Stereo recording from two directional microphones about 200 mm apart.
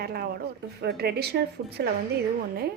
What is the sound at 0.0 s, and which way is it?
A woman's voice, 50° right (ahead or behind).